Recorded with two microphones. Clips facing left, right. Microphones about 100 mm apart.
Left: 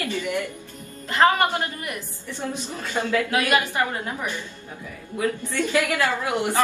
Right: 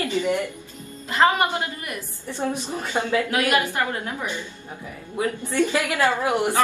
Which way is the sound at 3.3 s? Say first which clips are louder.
Even; 15° left (ahead or behind).